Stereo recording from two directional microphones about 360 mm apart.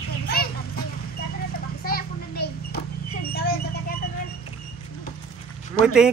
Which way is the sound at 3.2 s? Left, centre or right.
Left.